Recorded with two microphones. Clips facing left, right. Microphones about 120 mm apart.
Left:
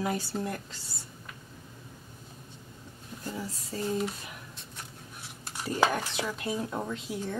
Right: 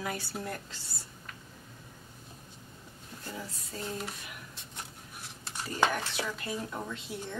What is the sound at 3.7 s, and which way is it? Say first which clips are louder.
Speech: left 6 dB; 35° left (ahead or behind).